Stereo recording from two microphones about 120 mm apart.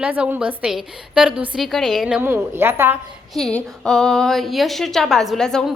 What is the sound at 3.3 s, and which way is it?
A woman's voice, 5° left (ahead or behind).